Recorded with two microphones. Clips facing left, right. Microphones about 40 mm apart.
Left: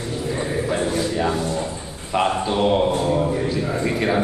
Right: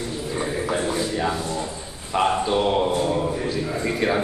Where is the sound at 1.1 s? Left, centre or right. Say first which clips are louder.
Left 3 dB; centre.